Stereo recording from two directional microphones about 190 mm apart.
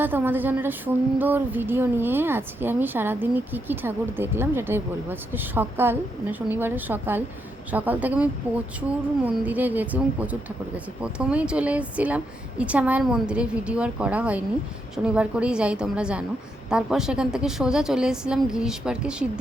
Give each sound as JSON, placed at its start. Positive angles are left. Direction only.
{"t": 0.0, "sound": "a woman's voice", "side_deg": -10}